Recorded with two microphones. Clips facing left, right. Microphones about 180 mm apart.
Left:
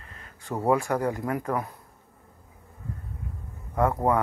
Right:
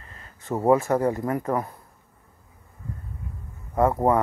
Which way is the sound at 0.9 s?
25° right (ahead or behind).